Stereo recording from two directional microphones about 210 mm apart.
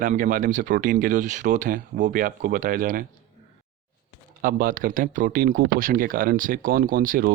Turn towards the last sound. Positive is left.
turn(degrees=-40)  # may be behind; listen again after turning